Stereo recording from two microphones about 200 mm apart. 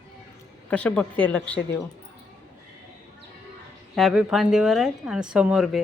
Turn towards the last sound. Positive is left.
turn(degrees=0)  # may be behind; listen again after turning